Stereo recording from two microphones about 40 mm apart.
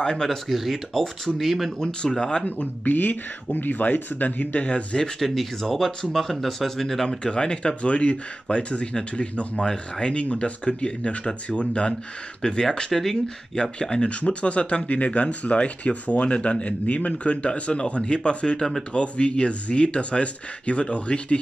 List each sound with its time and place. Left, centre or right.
0.0 s speech: centre
0.5 s speech: centre
1.8 s speech: centre
2.4 s speech: left
5.2 s speech: centre
7.1 s speech: left
12.4 s speech: centre